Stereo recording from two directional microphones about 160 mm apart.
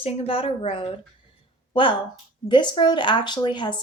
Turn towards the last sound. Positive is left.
turn(degrees=30)  # may be behind; listen again after turning